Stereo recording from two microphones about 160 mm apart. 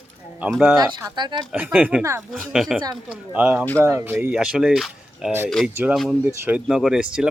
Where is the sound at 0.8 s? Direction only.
25° right (ahead or behind).